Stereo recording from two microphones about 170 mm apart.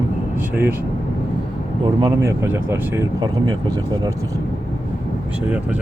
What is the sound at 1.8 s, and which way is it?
Speech, 25° right (ahead or behind).